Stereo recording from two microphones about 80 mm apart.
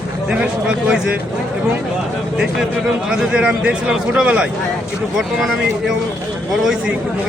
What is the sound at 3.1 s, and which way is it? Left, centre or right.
A man's voice, centre.